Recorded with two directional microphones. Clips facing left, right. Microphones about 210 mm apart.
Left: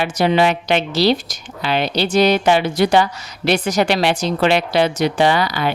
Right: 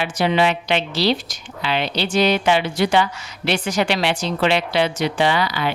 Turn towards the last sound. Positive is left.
turn(degrees=45)  # may be behind; listen again after turning